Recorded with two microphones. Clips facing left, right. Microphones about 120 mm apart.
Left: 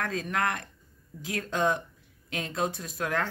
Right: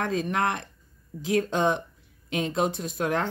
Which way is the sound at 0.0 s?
25° right (ahead or behind).